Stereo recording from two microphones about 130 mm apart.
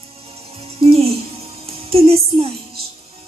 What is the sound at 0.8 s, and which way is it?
Speech, 45° right (ahead or behind).